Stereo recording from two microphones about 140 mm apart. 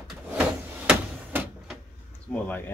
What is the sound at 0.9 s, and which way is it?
Door, 10° right (ahead or behind).